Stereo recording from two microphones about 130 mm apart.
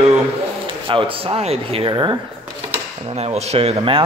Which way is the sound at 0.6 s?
40° right (ahead or behind).